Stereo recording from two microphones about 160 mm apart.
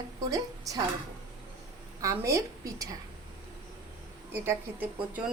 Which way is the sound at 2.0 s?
20° right (ahead or behind).